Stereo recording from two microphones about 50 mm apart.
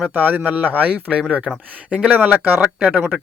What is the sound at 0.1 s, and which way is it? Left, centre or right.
Speech, right.